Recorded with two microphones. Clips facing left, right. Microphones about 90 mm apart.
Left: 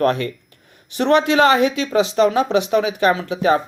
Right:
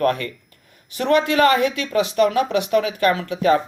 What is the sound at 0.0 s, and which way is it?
Speech, 25° left (ahead or behind).